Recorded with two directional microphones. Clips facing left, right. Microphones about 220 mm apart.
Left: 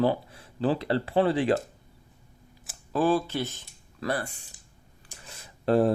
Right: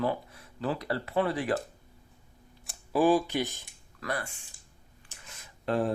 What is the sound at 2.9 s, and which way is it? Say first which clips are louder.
Speech: right 1 dB; 15° right (ahead or behind).